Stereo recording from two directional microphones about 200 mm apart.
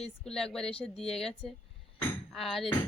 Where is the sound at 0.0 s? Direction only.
5° left (ahead or behind).